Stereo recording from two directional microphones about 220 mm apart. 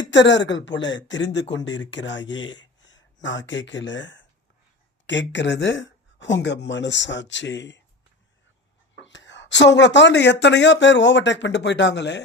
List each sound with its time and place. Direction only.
0.0 s speech: 55° left (ahead or behind)
9.0 s speech: 55° left (ahead or behind)